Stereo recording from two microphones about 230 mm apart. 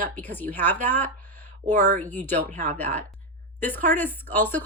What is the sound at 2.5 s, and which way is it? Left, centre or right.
Speech, right.